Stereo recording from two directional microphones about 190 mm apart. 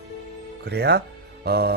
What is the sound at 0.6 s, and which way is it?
Speech, 60° right (ahead or behind).